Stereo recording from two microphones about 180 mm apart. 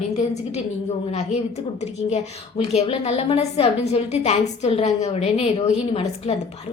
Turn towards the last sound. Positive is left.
turn(degrees=35)  # may be behind; listen again after turning